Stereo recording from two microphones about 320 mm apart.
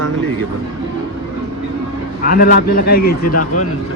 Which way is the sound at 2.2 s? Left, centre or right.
Left.